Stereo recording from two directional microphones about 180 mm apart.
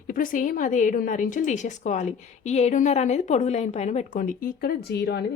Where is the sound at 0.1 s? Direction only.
50° left (ahead or behind).